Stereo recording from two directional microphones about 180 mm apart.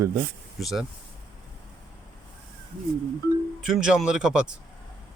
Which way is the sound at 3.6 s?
5° right (ahead or behind).